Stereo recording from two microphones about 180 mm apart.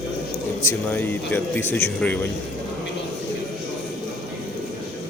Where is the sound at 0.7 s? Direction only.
10° left (ahead or behind).